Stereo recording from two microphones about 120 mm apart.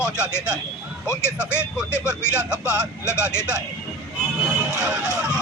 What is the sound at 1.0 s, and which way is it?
Speech, 20° left (ahead or behind).